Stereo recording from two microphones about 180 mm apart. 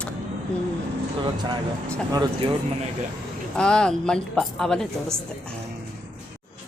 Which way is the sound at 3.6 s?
5° left (ahead or behind).